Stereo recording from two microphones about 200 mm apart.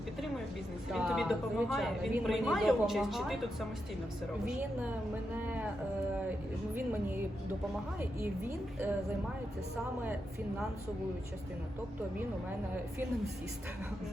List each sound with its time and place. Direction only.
0.9 s a woman's voice: centre (ahead or behind)
5.4 s speech: 10° right (ahead or behind)